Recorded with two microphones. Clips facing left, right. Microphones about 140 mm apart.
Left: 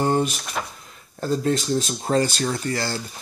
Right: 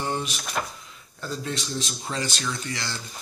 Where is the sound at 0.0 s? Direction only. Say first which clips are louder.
Left 8 dB; 45° left (ahead or behind).